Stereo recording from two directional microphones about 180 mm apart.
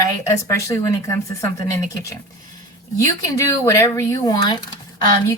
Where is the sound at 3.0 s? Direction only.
15° left (ahead or behind).